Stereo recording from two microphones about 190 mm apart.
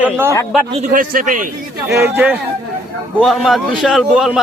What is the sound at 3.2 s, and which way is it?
A man's voice, centre (ahead or behind).